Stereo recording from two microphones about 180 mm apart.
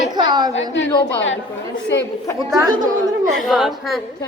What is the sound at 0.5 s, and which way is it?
Speech, 90° left.